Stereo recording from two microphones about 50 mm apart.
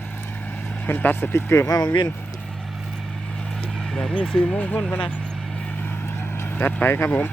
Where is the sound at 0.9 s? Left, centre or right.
Left.